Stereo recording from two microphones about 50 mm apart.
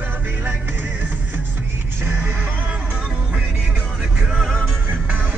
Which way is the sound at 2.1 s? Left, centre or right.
Right.